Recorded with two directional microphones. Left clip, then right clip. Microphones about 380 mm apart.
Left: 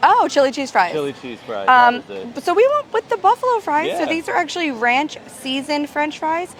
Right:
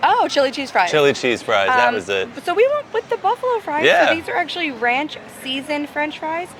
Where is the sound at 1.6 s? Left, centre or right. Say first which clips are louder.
Left 8 dB; left.